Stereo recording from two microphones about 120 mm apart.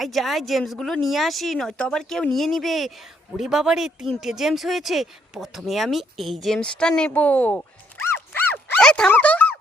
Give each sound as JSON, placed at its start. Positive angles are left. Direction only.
{"t": 0.0, "sound": "speech", "side_deg": 0}
{"t": 8.3, "sound": "dog", "side_deg": 15}
{"t": 8.8, "sound": "speech", "side_deg": 5}